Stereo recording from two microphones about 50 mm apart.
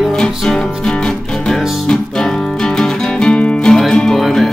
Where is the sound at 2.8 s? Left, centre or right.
Centre.